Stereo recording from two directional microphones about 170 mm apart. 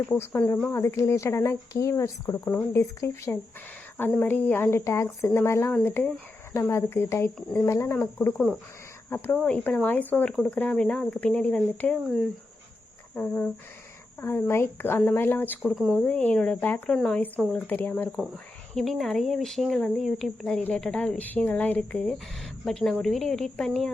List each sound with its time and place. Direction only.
0.1 s speech: 10° left (ahead or behind)
13.1 s speech: 10° left (ahead or behind)
15.7 s speech: 5° right (ahead or behind)